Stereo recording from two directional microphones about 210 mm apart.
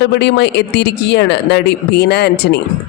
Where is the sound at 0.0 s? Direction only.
55° left (ahead or behind).